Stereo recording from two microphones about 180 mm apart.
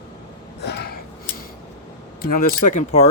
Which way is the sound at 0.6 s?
65° left (ahead or behind).